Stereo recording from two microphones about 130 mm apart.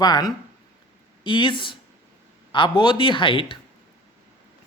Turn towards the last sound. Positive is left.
turn(degrees=40)  # may be behind; listen again after turning